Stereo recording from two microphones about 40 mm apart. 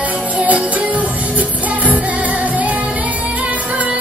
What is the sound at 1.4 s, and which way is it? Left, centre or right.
Music, right.